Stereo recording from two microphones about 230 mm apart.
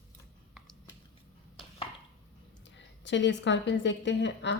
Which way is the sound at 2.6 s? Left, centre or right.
Left.